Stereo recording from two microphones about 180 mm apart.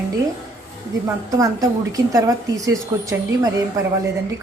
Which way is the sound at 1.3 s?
20° right (ahead or behind).